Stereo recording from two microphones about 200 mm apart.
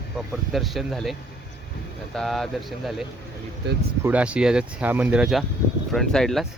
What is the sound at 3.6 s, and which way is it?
Speech, 60° right (ahead or behind).